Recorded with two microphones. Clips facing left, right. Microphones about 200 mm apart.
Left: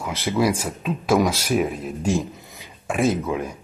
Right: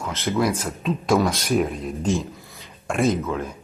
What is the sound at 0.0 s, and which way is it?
Speech, 10° left (ahead or behind).